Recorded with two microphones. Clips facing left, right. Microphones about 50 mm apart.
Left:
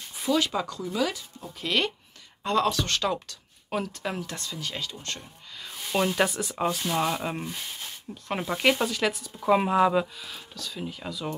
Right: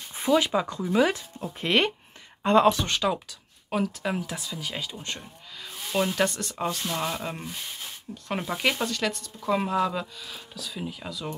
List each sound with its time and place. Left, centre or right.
0.1 s speech: right
0.9 s speech: right
3.0 s speech: centre
5.6 s speech: centre
10.2 s speech: centre